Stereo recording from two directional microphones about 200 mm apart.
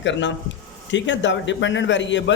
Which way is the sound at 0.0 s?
65° left (ahead or behind).